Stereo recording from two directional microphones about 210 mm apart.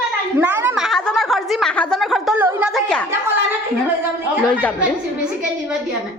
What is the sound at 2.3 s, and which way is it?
Chatter, 10° right (ahead or behind).